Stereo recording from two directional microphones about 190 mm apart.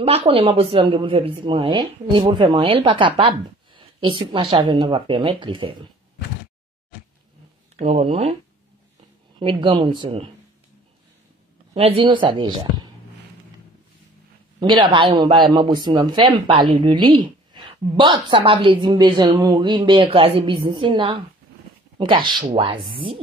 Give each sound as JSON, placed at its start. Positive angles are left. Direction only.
{"t": 0.0, "sound": "a man's voice", "side_deg": -30}
{"t": 7.7, "sound": "speech", "side_deg": -35}
{"t": 9.4, "sound": "a man's voice", "side_deg": -25}
{"t": 11.7, "sound": "a man's voice", "side_deg": -30}
{"t": 14.6, "sound": "a man's voice", "side_deg": -25}